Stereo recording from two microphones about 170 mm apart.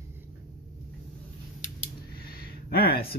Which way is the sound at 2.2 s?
65° left (ahead or behind).